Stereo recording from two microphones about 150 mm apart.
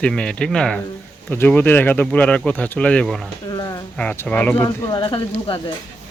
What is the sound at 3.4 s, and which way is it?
Speech, 25° left (ahead or behind).